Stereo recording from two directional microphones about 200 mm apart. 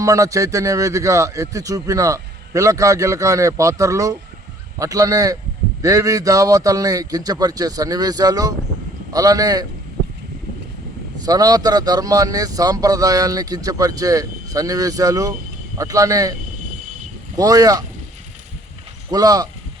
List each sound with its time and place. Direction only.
0.0 s a man's voice: 15° right (ahead or behind)
11.2 s a man's voice: 20° right (ahead or behind)
17.3 s a man's voice: 15° right (ahead or behind)
19.1 s a man's voice: 20° right (ahead or behind)